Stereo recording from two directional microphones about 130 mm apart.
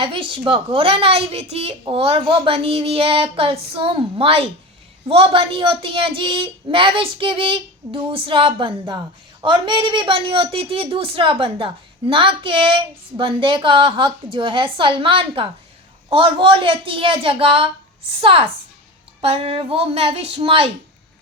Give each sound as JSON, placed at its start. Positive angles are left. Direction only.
{"t": 0.0, "sound": "a woman's voice", "side_deg": -40}